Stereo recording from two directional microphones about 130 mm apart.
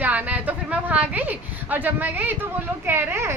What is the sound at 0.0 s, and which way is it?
A woman's voice, 10° right (ahead or behind).